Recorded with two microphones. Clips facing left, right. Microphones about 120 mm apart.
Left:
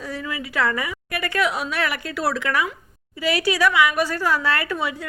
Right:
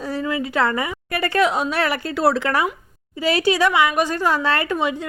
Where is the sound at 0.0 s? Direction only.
30° right (ahead or behind).